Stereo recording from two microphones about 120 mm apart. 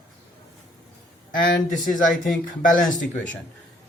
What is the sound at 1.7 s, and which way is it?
Speech, 90° left.